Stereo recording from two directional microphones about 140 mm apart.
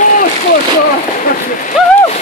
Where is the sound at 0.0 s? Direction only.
75° left (ahead or behind).